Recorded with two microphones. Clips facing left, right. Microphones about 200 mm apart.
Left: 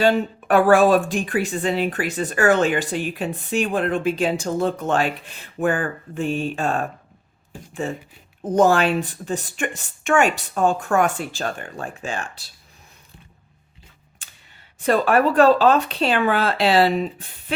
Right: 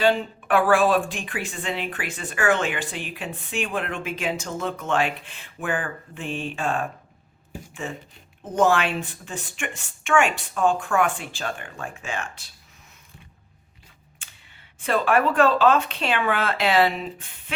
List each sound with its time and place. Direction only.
0.0 s speech: 45° left (ahead or behind)
14.2 s a sound: 40° left (ahead or behind)
14.8 s speech: 40° left (ahead or behind)